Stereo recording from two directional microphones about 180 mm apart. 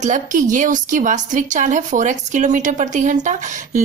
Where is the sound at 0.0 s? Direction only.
45° right (ahead or behind).